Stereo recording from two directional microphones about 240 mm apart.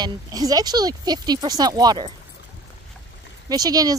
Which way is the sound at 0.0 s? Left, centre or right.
Centre.